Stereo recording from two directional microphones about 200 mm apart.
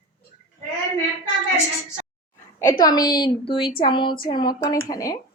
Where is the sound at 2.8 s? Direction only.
20° left (ahead or behind).